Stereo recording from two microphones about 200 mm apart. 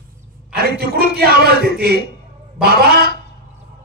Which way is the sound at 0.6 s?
50° right (ahead or behind).